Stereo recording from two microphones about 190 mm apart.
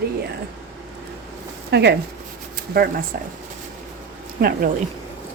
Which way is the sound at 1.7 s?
60° right (ahead or behind).